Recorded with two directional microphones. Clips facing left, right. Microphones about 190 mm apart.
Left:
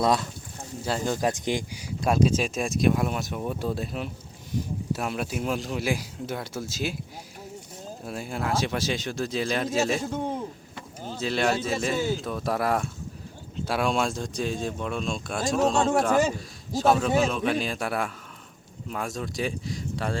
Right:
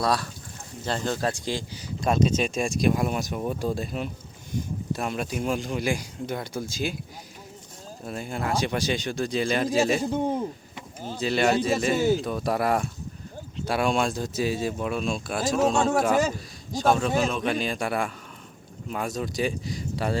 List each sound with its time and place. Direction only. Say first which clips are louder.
0.0 s speech: left 2 dB; 20° left (ahead or behind)
0.9 s speech: left 1 dB; 10° left (ahead or behind)
8.0 s speech: right 1 dB; 5° left (ahead or behind)